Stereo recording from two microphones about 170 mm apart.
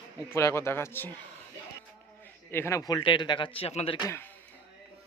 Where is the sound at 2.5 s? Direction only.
15° left (ahead or behind); by 3.9 s 35° left (ahead or behind).